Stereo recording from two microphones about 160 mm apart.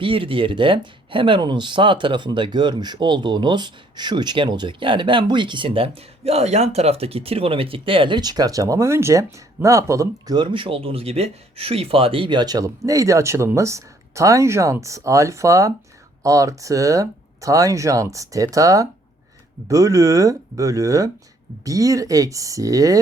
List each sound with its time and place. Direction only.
0.0 s speech: 35° right (ahead or behind)